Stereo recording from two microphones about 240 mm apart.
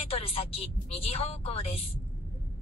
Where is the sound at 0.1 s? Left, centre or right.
Left.